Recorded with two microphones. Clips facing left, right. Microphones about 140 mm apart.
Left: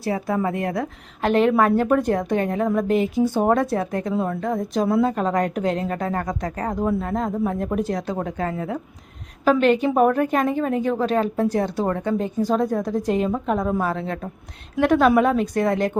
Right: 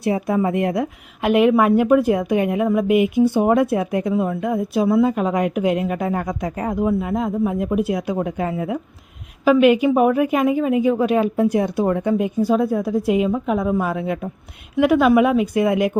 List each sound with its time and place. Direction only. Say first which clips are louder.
0.0 s a woman's voice: right 4 dB; 15° right (ahead or behind)